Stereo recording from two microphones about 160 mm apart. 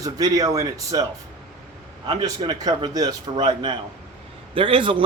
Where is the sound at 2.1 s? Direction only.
25° right (ahead or behind).